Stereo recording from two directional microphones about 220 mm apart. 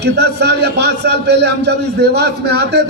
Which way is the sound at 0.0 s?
50° right (ahead or behind).